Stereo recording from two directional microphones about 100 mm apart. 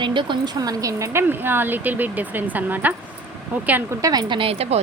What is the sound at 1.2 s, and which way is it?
A woman's voice, 20° right (ahead or behind).